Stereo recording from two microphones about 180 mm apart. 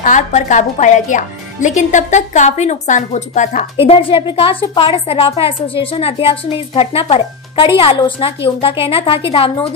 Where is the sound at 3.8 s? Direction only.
30° left (ahead or behind).